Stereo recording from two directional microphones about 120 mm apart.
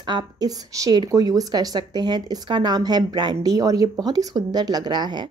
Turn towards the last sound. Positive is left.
turn(degrees=-35)  # may be behind; listen again after turning